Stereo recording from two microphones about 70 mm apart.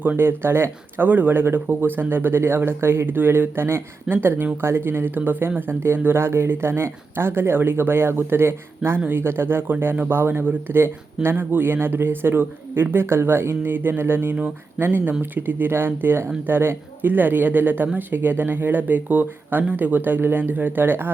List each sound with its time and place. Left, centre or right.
0.0 s speech: right